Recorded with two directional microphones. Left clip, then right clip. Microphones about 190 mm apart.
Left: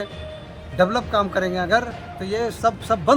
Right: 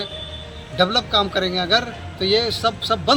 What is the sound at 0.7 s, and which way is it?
A man's voice, 10° left (ahead or behind).